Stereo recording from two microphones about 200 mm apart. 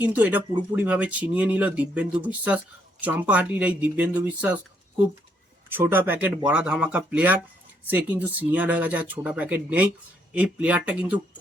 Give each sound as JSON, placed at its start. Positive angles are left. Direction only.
{"t": 0.0, "sound": "speech", "side_deg": -10}
{"t": 5.7, "sound": "speech", "side_deg": -10}